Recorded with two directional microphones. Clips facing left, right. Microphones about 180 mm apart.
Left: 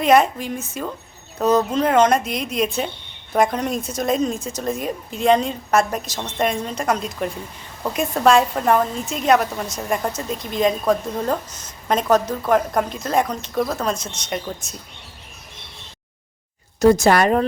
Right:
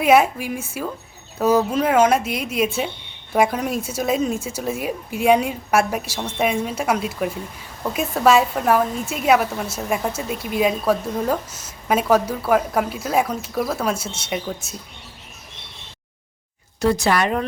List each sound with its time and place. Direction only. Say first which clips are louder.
0.0 s a woman's voice: even; 5° right (ahead or behind)
16.8 s speech: left 5 dB; 45° left (ahead or behind)